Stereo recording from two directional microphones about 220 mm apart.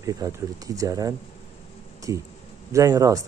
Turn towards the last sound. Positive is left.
turn(degrees=-15)  # may be behind; listen again after turning